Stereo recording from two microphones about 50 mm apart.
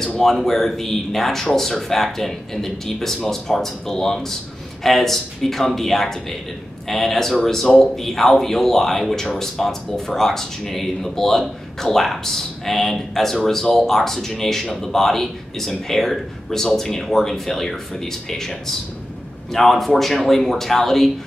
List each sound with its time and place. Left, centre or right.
0.0 s a man's voice: centre